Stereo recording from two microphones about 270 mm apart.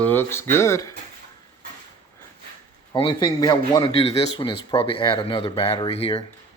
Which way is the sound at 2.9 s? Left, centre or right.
Centre.